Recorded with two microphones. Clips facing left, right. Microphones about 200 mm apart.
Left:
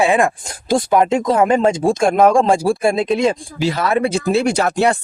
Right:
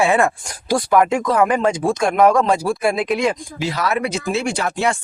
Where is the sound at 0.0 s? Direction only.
15° left (ahead or behind).